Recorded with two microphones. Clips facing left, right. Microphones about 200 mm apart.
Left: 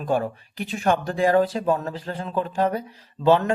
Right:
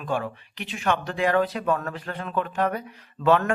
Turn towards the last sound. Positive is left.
turn(degrees=30)  # may be behind; listen again after turning